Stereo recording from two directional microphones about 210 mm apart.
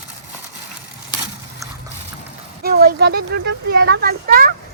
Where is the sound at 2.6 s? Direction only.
50° right (ahead or behind).